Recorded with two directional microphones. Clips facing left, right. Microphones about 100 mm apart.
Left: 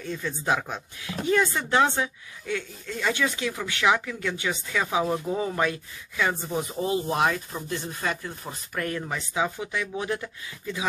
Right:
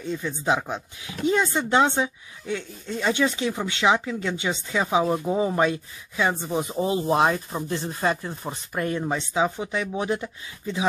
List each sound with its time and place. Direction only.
0.0 s speech: 20° right (ahead or behind)